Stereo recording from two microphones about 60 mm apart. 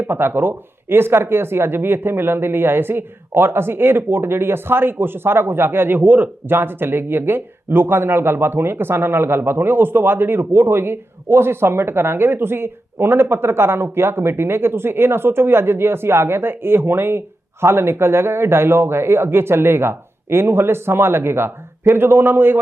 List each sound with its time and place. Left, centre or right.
0.1 s speech: right